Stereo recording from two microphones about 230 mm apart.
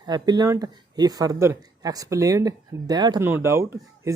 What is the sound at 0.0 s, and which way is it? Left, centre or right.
A man's voice, centre.